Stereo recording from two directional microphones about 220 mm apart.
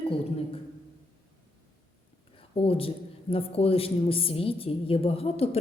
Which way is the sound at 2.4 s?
25° left (ahead or behind).